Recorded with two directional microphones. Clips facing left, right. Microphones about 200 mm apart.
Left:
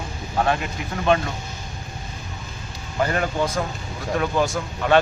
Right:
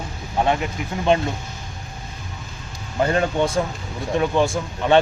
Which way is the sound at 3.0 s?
25° right (ahead or behind).